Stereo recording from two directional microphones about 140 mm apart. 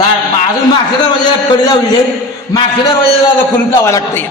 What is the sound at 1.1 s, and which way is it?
A man's voice, 30° left (ahead or behind).